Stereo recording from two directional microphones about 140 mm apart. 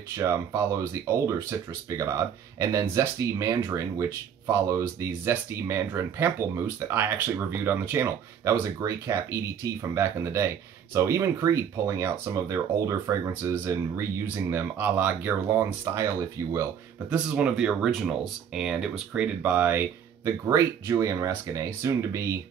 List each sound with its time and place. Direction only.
0.2 s speech: 20° right (ahead or behind)
17.1 s speech: 10° right (ahead or behind)